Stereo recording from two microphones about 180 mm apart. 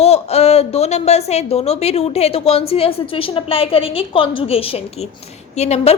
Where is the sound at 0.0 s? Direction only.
35° left (ahead or behind).